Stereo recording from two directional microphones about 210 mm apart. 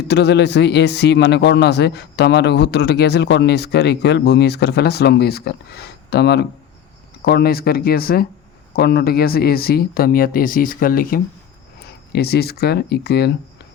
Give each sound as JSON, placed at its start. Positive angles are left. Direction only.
{"t": 0.1, "sound": "a man's voice", "side_deg": 55}